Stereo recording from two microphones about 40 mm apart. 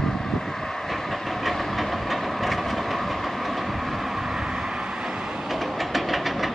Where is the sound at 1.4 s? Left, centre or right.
Centre.